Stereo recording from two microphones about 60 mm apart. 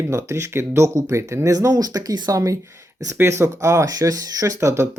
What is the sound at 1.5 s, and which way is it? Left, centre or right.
Speech, right.